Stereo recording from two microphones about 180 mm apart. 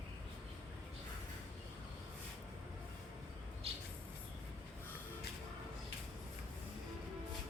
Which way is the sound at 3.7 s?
35° right (ahead or behind).